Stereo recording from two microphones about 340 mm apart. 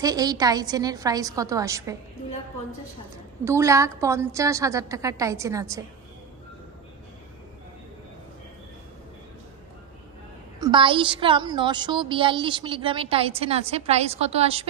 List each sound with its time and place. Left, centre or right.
0.0 s a woman's voice: centre
3.4 s a woman's voice: centre
10.6 s a woman's voice: centre